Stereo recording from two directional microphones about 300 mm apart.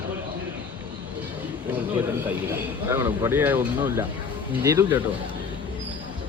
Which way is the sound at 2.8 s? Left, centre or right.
Centre.